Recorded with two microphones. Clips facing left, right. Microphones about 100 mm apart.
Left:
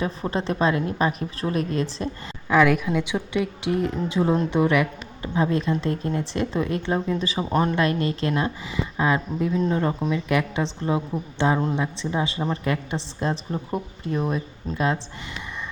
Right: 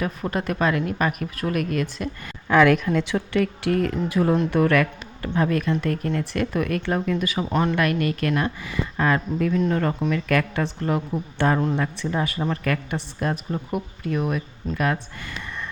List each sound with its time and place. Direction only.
0.0 s a woman's voice: 25° left (ahead or behind)
2.5 s a woman's voice: 5° left (ahead or behind); by 15.0 s 25° left (ahead or behind)